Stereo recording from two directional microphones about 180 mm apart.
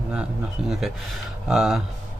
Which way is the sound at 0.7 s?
Centre (ahead or behind).